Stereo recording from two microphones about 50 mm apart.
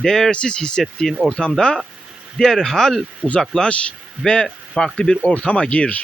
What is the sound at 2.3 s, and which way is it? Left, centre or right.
Speech, centre.